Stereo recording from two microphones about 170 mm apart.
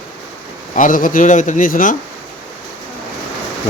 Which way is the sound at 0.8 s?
50° left (ahead or behind).